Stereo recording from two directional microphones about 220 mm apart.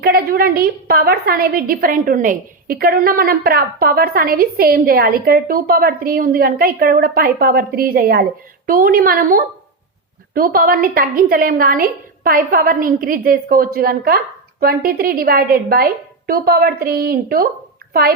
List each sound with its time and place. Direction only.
0.0 s a woman's voice: 40° right (ahead or behind)